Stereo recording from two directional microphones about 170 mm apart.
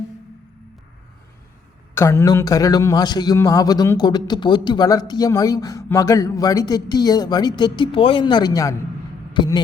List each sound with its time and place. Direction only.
2.0 s a man's voice: 15° left (ahead or behind)